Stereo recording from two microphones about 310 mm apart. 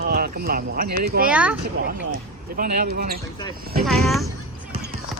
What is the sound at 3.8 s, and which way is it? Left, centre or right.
Speech, centre.